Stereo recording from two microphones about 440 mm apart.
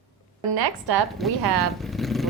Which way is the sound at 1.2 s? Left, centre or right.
Centre.